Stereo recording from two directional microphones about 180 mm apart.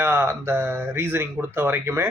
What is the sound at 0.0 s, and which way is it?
A man's voice, 10° right (ahead or behind).